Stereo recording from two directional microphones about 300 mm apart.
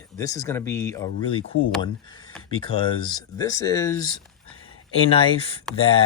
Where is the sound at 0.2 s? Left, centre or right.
Centre.